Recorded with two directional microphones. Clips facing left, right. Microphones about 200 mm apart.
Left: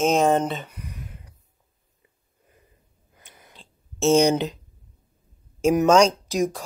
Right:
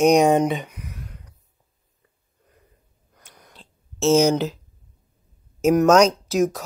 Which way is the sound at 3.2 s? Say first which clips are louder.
Right 1 dB; centre (ahead or behind).